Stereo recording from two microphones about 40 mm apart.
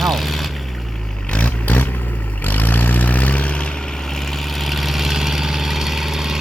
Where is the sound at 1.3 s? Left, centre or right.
Left.